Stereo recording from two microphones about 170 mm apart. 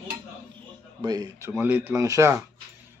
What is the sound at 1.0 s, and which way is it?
Speech, 20° right (ahead or behind).